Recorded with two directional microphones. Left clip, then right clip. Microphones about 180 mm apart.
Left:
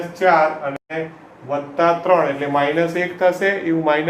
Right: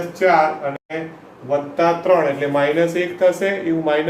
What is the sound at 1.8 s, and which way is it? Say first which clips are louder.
Speech: left 1 dB; 5° left (ahead or behind).